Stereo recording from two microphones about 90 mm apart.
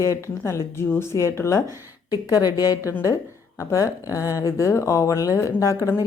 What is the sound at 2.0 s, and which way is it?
A woman's voice, 45° left (ahead or behind).